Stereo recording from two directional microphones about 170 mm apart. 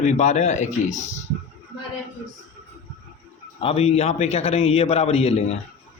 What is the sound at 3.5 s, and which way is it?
A man's voice, 35° left (ahead or behind).